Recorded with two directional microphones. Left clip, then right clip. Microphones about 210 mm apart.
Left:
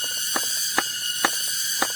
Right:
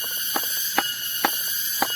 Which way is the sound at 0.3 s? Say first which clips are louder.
Even; centre (ahead or behind).